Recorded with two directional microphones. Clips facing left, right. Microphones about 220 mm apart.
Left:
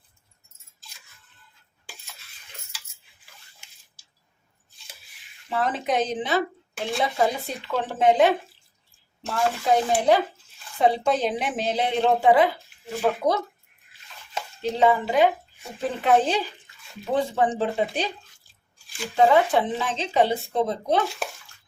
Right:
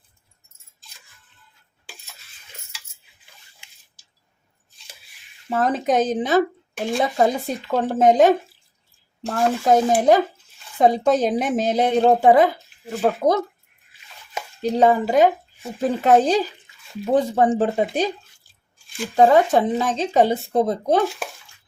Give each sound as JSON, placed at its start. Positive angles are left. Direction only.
{"t": 5.5, "sound": "speech", "side_deg": -40}
{"t": 14.6, "sound": "speech", "side_deg": -40}
{"t": 19.1, "sound": "speech", "side_deg": -40}